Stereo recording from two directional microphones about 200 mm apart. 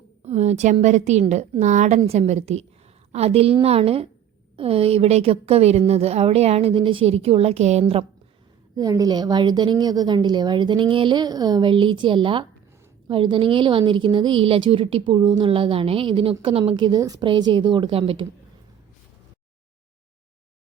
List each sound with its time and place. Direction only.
0.3 s a woman's voice: 35° right (ahead or behind)
8.7 s a woman's voice: 20° right (ahead or behind)